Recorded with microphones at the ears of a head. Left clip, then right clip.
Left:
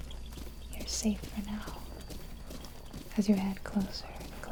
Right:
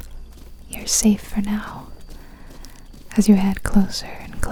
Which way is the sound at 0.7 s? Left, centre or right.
Right.